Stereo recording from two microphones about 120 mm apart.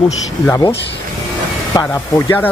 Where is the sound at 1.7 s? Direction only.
30° left (ahead or behind).